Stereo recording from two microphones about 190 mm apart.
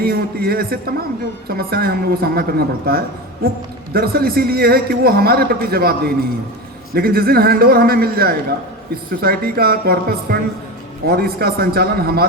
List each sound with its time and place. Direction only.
0.0 s a man's voice: 55° right (ahead or behind)